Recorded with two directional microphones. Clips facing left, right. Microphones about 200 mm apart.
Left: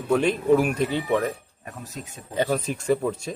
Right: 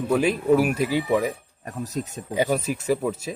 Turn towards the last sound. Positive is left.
turn(degrees=-5)  # may be behind; listen again after turning